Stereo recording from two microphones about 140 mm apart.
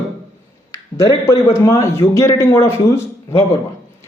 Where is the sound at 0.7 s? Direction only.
20° left (ahead or behind).